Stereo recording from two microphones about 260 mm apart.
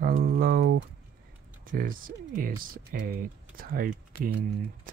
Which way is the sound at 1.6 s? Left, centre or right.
Right.